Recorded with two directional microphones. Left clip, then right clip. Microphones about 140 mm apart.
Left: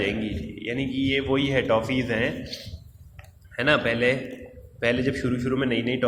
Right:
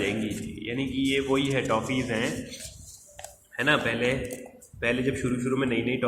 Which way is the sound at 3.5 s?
25° left (ahead or behind).